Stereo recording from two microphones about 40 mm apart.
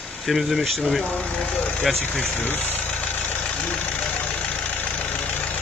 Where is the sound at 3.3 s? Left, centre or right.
Left.